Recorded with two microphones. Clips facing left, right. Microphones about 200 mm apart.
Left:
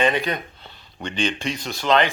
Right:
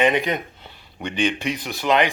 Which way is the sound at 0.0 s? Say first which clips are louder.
Right 2 dB; 15° right (ahead or behind).